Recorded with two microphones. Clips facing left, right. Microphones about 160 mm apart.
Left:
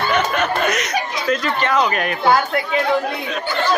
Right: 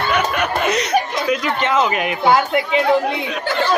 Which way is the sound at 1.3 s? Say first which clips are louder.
Even; 15° right (ahead or behind).